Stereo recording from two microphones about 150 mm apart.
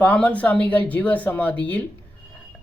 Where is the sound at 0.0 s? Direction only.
10° left (ahead or behind).